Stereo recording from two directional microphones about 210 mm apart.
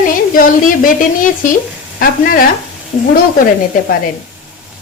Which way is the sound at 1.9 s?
45° left (ahead or behind).